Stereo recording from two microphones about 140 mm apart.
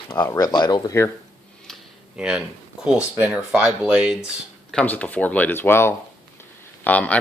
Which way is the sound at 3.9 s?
10° right (ahead or behind).